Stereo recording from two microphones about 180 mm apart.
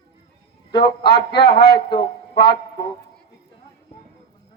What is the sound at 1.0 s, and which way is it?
Speech, 60° left (ahead or behind).